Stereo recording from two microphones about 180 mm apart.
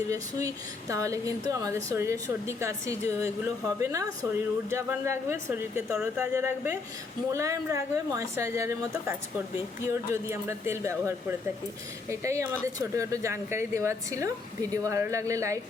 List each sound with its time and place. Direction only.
0.1 s speech: 20° right (ahead or behind)